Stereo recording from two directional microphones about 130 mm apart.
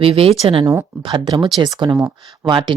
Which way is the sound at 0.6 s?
20° right (ahead or behind).